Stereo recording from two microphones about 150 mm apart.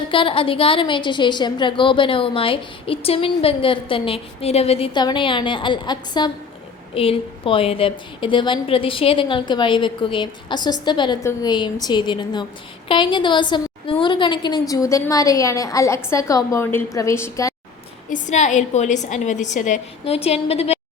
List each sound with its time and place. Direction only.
0.1 s a woman's voice: 35° left (ahead or behind)
6.9 s a woman's voice: 40° left (ahead or behind)
11.2 s a woman's voice: 20° left (ahead or behind)
11.5 s a woman's voice: 30° left (ahead or behind)
18.1 s a woman's voice: 55° left (ahead or behind)